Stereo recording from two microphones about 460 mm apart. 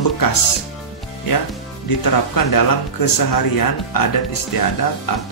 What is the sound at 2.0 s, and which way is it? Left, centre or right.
Speech, left.